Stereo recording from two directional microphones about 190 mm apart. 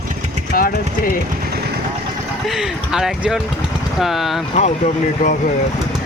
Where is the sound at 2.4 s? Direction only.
Centre (ahead or behind).